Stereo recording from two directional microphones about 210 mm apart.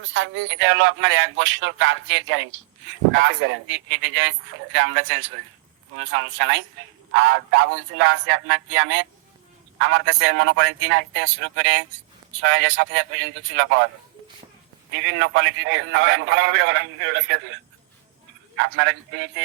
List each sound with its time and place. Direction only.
0.0 s a man's voice: 60° right (ahead or behind)
14.9 s a man's voice: 60° right (ahead or behind)